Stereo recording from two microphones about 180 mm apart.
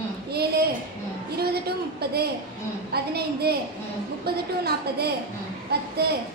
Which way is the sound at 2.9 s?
60° right (ahead or behind).